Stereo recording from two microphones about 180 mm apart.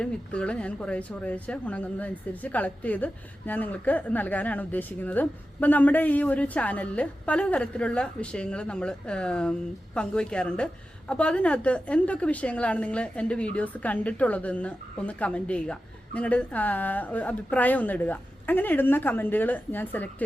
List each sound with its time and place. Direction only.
0.0 s speech: 5° left (ahead or behind)